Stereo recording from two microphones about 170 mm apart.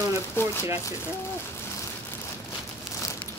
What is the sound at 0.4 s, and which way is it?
Speech, 15° left (ahead or behind).